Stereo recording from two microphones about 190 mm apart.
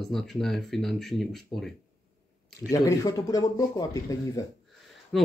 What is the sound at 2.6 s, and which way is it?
Speech, 15° left (ahead or behind).